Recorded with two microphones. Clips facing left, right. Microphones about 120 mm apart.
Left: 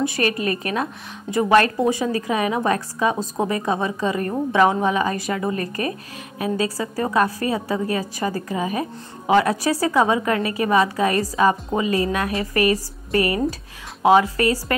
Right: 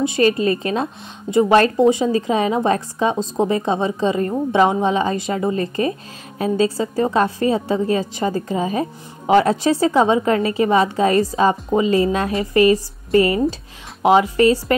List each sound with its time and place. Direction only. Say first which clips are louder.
0.0 s a woman's voice: right 5 dB; 25° right (ahead or behind)